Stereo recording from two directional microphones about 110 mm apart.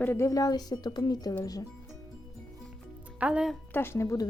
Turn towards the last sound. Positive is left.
turn(degrees=30)  # may be behind; listen again after turning